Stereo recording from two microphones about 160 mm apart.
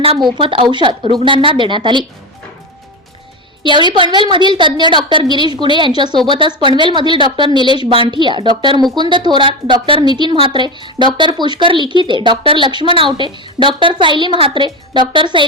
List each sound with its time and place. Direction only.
0.0 s a woman's voice: 30° right (ahead or behind)
3.6 s a woman's voice: 30° right (ahead or behind)